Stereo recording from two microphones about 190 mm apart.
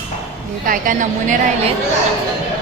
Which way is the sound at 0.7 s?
45° right (ahead or behind).